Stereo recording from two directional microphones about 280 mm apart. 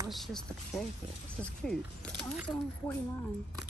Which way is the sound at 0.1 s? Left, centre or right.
Centre.